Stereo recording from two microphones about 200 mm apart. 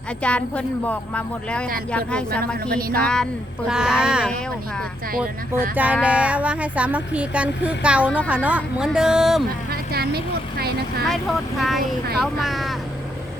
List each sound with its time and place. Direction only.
0.2 s speech: 5° left (ahead or behind)
2.6 s speech: 50° right (ahead or behind)
2.9 s speech: 5° left (ahead or behind)
5.1 s speech: 45° right (ahead or behind)
5.7 s speech: 5° right (ahead or behind)
9.6 s a woman's voice: 50° right (ahead or behind)
11.1 s speech: centre (ahead or behind)